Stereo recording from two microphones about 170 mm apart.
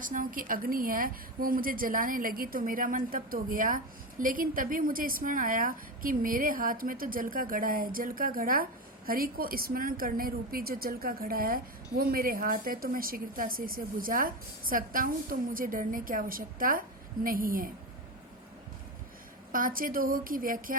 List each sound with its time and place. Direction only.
0.0 s a woman's voice: 55° right (ahead or behind)
19.5 s a woman's voice: 55° right (ahead or behind)